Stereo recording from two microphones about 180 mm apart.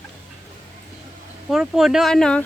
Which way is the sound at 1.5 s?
Centre (ahead or behind).